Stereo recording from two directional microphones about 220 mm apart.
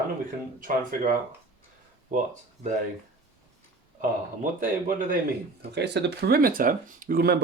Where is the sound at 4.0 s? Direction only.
35° right (ahead or behind).